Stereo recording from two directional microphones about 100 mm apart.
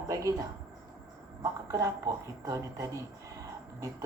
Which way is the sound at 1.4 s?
30° right (ahead or behind).